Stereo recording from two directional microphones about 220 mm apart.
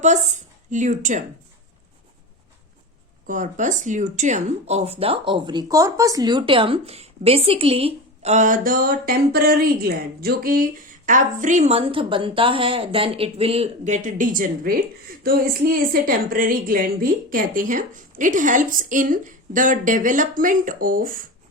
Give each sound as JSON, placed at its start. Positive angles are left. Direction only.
{"t": 0.0, "sound": "a woman's voice", "side_deg": -35}
{"t": 3.2, "sound": "speech", "side_deg": -35}